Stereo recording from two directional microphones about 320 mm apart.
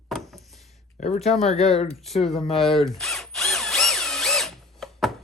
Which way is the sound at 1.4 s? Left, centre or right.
Centre.